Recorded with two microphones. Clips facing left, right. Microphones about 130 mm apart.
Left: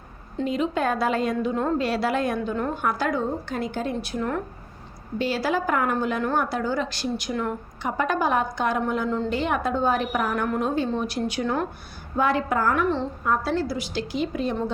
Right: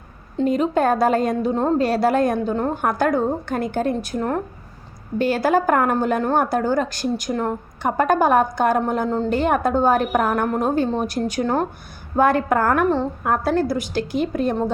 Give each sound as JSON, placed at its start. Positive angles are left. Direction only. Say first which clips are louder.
{"t": 0.4, "sound": "a woman's voice", "louder": "right 6 dB", "side_deg": -45}
{"t": 12.1, "sound": "a woman's voice", "louder": "right 5 dB", "side_deg": -50}